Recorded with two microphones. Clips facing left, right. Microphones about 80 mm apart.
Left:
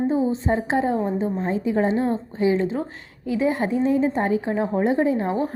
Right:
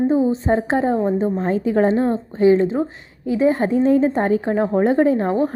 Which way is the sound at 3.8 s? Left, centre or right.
Right.